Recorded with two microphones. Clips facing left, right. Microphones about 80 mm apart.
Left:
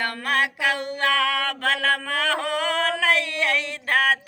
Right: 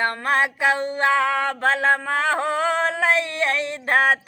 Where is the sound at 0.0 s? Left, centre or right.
Right.